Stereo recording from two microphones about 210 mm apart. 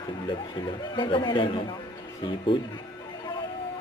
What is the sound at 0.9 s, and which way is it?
Speech, 20° left (ahead or behind).